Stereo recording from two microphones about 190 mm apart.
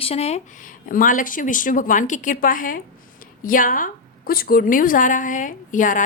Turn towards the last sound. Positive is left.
turn(degrees=45)  # may be behind; listen again after turning